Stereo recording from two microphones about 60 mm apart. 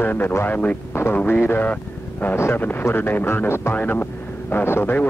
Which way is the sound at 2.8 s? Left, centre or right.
Left.